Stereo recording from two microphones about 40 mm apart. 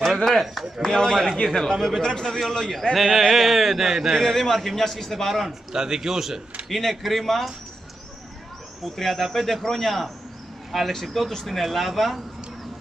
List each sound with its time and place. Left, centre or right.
0.2 s speech: centre
1.2 s a man's voice: centre
1.6 s a man's voice: centre
2.7 s a man's voice: centre
4.2 s a man's voice: centre
5.7 s a man's voice: centre
6.7 s speech: centre
8.8 s speech: centre